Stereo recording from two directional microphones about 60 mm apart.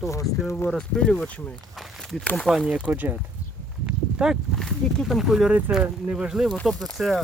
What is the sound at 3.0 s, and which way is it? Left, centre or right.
Speech, right.